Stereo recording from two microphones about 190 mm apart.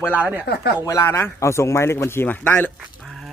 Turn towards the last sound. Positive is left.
turn(degrees=0)  # may be behind; listen again after turning